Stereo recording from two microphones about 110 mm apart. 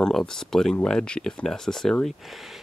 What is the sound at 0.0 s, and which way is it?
Speech, 5° left (ahead or behind).